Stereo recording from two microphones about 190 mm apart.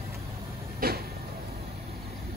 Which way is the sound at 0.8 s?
50° right (ahead or behind).